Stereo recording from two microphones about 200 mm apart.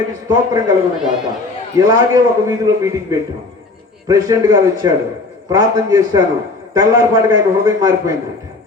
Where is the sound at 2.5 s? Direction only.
15° right (ahead or behind).